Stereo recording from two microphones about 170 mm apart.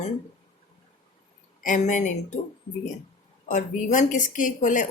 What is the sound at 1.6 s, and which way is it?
Speech, 50° left (ahead or behind).